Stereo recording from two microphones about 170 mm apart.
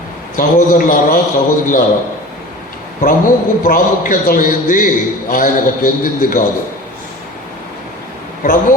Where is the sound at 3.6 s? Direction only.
55° left (ahead or behind).